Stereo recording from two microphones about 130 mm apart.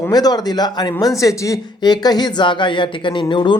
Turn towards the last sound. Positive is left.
turn(degrees=35)  # may be behind; listen again after turning